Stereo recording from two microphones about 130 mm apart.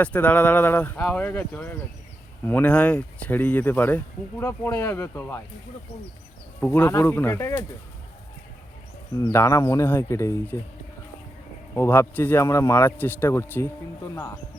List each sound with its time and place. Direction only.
0.0 s speech: 10° left (ahead or behind)
6.6 s speech: 15° left (ahead or behind)
9.1 s a man's voice: 25° left (ahead or behind)
11.7 s a man's voice: 20° left (ahead or behind)